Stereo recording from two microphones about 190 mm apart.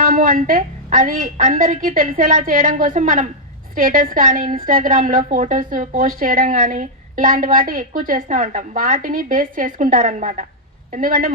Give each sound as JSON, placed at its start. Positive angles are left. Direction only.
{"t": 0.0, "sound": "a woman's voice", "side_deg": -45}